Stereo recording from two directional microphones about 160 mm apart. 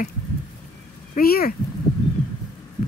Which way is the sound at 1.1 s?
70° left (ahead or behind).